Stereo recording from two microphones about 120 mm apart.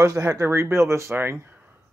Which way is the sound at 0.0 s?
25° right (ahead or behind).